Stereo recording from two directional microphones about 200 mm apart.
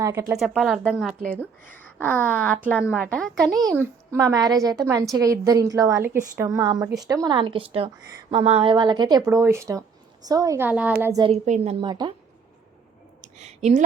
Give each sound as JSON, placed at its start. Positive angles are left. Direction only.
{"t": 0.0, "sound": "speech", "side_deg": -15}
{"t": 3.6, "sound": "a woman's voice", "side_deg": -15}
{"t": 11.2, "sound": "a woman's voice", "side_deg": -35}
{"t": 11.9, "sound": "speech", "side_deg": -20}
{"t": 13.2, "sound": "a sound", "side_deg": -35}